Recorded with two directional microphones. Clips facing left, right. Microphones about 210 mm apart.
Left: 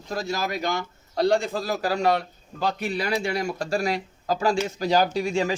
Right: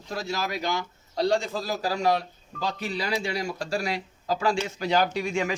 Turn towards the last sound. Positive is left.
turn(degrees=35)  # may be behind; listen again after turning